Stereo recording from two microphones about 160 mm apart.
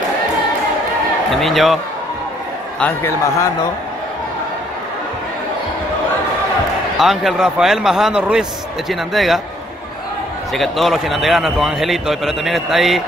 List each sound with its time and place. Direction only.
1.3 s a man's voice: centre (ahead or behind)
2.8 s a man's voice: 15° left (ahead or behind)
7.0 s a man's voice: centre (ahead or behind)
10.5 s a man's voice: centre (ahead or behind)